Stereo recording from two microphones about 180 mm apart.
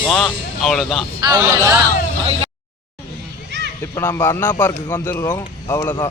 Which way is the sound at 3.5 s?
75° right (ahead or behind).